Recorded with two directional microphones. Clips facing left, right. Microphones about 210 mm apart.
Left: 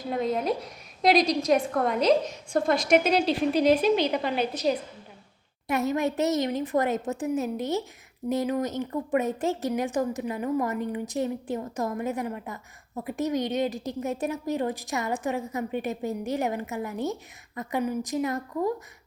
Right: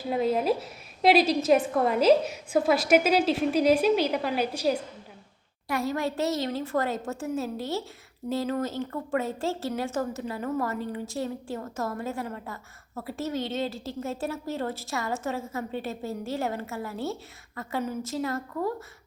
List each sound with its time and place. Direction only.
0.1 s a woman's voice: 5° right (ahead or behind)
5.6 s a woman's voice: 20° left (ahead or behind)